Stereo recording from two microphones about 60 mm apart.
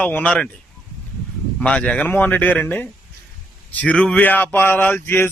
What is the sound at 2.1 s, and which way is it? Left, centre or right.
A man's voice, left.